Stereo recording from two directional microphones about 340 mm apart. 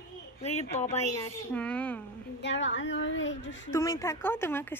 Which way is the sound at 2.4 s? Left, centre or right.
Left.